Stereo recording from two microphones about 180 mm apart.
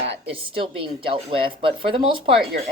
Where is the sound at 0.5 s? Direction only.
30° right (ahead or behind).